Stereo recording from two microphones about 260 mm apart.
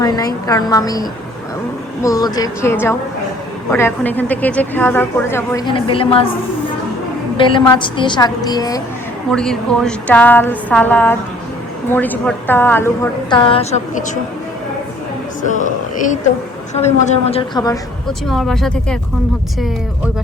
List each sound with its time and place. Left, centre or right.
0.0 s a woman's voice: centre
7.3 s speech: centre
9.3 s speech: centre; by 14.2 s left
15.4 s a woman's voice: left
18.3 s speech: centre